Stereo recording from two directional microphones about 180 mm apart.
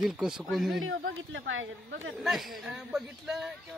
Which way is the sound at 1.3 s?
90° right.